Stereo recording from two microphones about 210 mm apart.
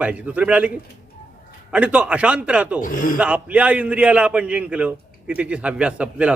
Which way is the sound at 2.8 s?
40° left (ahead or behind).